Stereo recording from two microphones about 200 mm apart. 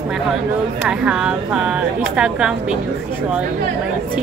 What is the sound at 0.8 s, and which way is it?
Speech, 5° right (ahead or behind).